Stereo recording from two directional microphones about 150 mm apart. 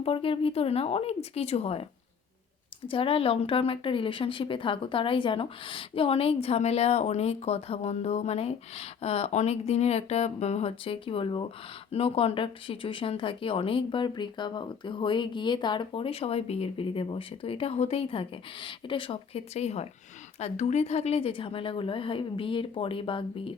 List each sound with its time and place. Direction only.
0.0 s speech: 40° left (ahead or behind)
2.9 s speech: 35° left (ahead or behind)